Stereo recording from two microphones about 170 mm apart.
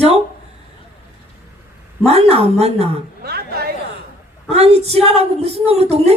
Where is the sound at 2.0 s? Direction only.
40° right (ahead or behind).